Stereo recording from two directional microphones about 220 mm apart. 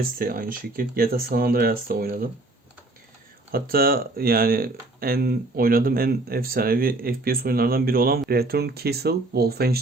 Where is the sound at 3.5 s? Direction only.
45° right (ahead or behind).